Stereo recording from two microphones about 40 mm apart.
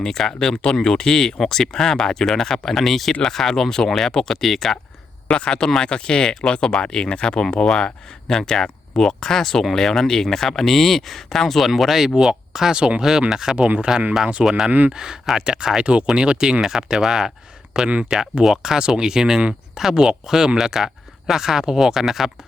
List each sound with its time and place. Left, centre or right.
0.0 s speech: centre
5.3 s speech: left; by 12.1 s centre
12.3 s speech: centre
14.4 s speech: centre
15.8 s speech: right; by 17.3 s centre
17.7 s speech: right